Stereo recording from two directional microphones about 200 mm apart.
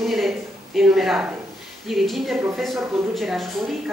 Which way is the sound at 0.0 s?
Centre (ahead or behind).